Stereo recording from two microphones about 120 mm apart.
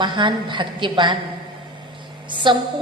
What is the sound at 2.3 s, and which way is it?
Speech, 45° right (ahead or behind).